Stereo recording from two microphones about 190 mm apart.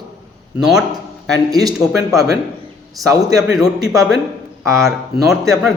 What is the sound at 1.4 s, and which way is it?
Speech, 20° right (ahead or behind).